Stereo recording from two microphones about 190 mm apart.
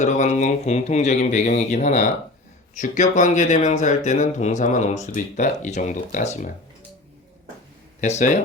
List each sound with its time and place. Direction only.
0.0 s speech: 40° left (ahead or behind)
8.0 s speech: 40° left (ahead or behind)